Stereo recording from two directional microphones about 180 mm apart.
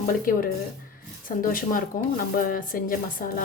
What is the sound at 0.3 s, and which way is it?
Speech, 50° left (ahead or behind).